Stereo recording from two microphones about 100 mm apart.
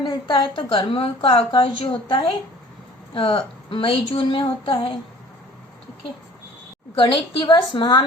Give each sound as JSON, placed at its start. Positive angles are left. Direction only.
{"t": 0.0, "sound": "a woman's voice", "side_deg": 50}
{"t": 1.5, "sound": "a woman's voice", "side_deg": 60}
{"t": 6.9, "sound": "a woman's voice", "side_deg": 55}